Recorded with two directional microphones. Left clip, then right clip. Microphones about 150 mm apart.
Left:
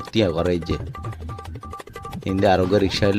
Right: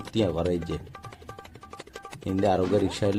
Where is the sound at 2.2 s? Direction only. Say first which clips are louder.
Left 6 dB; 55° left (ahead or behind).